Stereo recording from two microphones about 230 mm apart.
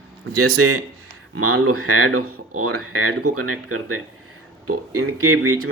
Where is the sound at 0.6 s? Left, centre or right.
Right.